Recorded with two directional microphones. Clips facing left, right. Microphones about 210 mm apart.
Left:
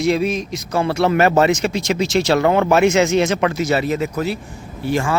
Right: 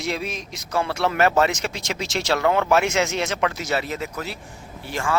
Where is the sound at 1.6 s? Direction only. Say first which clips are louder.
Left 9 dB; 5° left (ahead or behind).